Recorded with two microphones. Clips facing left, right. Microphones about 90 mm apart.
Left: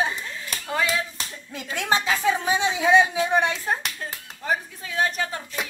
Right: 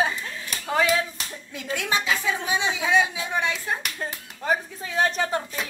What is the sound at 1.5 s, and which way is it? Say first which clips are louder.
A woman's voice: left 2 dB; 30° left (ahead or behind).